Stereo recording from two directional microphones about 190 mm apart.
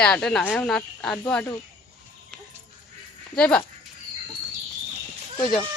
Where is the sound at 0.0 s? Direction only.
5° left (ahead or behind).